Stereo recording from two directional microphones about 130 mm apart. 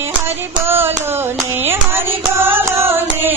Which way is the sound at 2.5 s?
15° right (ahead or behind).